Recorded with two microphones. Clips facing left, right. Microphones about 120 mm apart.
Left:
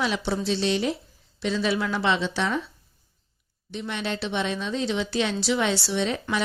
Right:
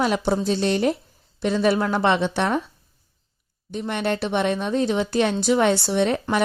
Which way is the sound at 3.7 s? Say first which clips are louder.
Right 6 dB; 50° right (ahead or behind).